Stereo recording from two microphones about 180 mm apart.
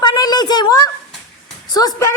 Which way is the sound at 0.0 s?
20° left (ahead or behind).